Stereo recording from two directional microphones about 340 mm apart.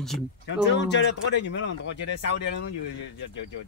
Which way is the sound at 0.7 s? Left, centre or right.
Left.